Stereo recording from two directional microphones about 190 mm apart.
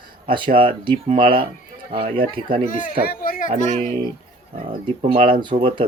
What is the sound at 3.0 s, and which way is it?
Speech, 50° left (ahead or behind).